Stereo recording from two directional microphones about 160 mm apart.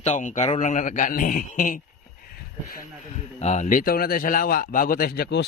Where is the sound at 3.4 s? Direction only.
45° left (ahead or behind).